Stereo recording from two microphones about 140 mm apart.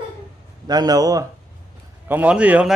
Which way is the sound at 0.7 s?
30° right (ahead or behind).